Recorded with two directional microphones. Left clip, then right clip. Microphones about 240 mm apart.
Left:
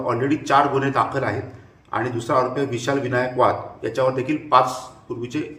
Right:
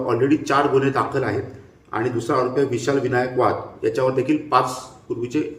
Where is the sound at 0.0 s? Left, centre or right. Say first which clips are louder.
Right 3 dB; centre.